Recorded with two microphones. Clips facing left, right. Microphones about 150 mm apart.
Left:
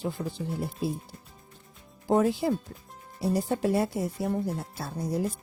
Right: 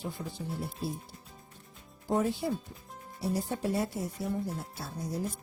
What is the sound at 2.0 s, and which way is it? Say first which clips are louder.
Speech: left 6 dB; 90° left.